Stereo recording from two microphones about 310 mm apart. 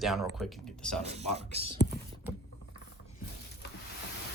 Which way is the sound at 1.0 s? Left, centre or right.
Centre.